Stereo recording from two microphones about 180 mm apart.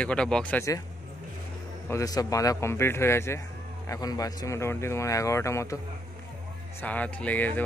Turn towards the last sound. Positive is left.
turn(degrees=10)  # may be behind; listen again after turning